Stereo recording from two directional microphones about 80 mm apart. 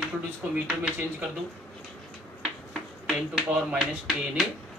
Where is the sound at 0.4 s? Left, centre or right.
Centre.